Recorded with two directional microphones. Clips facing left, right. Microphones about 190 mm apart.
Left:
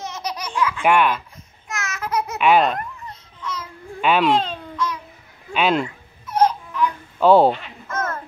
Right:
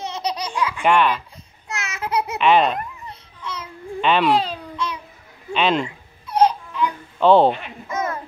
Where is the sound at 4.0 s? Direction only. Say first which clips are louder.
Even; 5° left (ahead or behind).